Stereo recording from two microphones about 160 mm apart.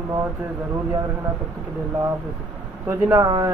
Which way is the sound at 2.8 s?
20° right (ahead or behind).